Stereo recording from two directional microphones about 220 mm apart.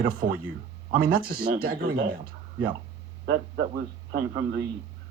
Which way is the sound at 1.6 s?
40° right (ahead or behind).